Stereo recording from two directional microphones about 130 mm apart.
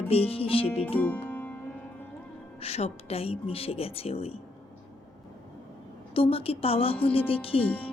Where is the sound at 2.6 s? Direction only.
55° left (ahead or behind).